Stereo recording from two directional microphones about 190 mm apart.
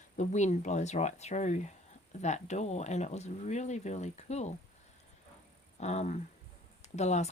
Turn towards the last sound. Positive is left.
turn(degrees=35)  # may be behind; listen again after turning